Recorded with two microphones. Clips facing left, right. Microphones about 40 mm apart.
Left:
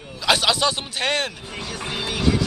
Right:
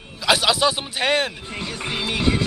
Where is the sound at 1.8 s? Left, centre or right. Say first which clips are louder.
Right 1 dB; right.